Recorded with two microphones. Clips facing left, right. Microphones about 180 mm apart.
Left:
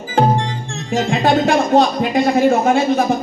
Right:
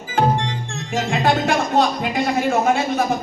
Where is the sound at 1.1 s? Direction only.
30° left (ahead or behind).